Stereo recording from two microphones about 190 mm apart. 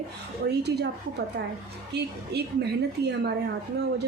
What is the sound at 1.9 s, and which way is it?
A woman's voice, 60° right (ahead or behind).